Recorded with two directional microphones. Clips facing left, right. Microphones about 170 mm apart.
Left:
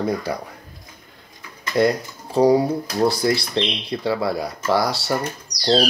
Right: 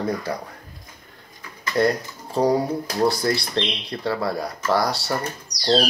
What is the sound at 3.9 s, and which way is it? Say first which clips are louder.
Speech: left 3 dB; 10° left (ahead or behind).